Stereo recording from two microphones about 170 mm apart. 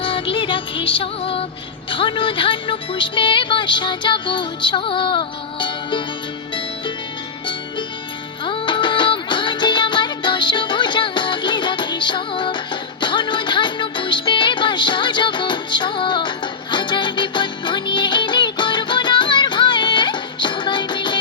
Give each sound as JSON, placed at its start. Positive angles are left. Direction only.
{"t": 0.0, "sound": "music", "side_deg": 30}
{"t": 1.9, "sound": "speech", "side_deg": 30}
{"t": 8.4, "sound": "music", "side_deg": 30}